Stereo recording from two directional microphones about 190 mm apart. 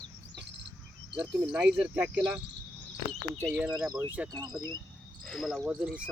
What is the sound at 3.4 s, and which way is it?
Speech, 5° right (ahead or behind).